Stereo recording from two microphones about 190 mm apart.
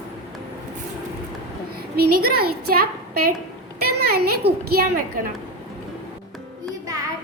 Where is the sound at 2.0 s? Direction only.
55° right (ahead or behind).